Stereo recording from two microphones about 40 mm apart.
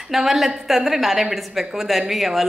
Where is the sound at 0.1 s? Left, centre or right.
Centre.